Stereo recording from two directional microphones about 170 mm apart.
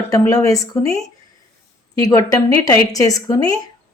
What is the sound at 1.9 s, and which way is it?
A woman's voice, 20° left (ahead or behind).